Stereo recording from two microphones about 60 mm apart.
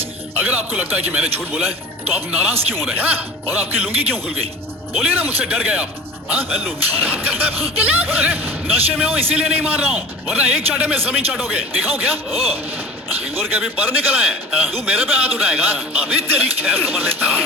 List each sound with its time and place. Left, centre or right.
0.0 s a man's voice: right
7.0 s speech: right
13.3 s speech: right